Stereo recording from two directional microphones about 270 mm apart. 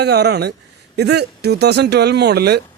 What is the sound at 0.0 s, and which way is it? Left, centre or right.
Speech, right.